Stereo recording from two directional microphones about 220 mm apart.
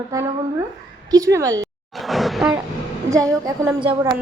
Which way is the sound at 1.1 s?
15° right (ahead or behind).